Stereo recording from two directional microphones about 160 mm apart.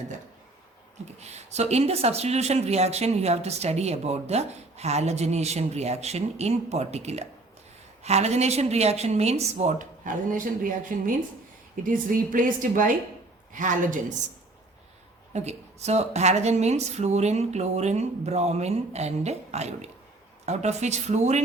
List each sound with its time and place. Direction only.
1.2 s a woman's voice: 45° right (ahead or behind)
15.3 s speech: 45° right (ahead or behind)